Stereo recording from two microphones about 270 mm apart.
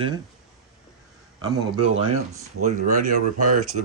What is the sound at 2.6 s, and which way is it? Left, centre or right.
Speech, right.